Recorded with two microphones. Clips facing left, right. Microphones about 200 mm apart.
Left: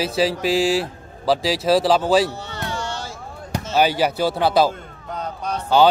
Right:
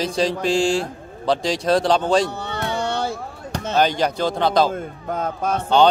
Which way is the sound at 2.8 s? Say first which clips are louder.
Right 7 dB; 60° right (ahead or behind).